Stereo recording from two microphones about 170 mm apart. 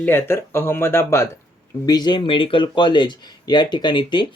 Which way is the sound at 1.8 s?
25° left (ahead or behind).